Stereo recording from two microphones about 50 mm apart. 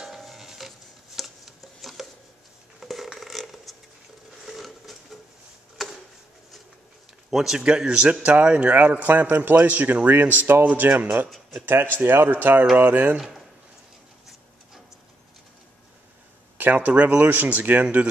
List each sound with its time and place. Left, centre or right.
0.0 s chopping: centre
2.8 s a sound: centre
7.2 s speech: centre
7.6 s a man's voice: centre; by 10.9 s right
11.6 s speech: right
16.5 s speech: right